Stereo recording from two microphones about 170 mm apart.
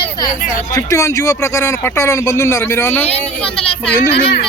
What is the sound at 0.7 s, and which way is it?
Speech, 15° left (ahead or behind).